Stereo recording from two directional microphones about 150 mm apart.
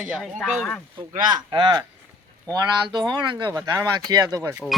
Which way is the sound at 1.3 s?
30° right (ahead or behind).